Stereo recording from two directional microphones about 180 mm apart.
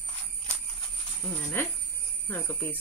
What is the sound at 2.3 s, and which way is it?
Speech, 10° left (ahead or behind).